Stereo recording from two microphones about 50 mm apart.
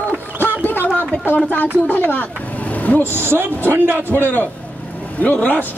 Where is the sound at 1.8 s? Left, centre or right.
Left.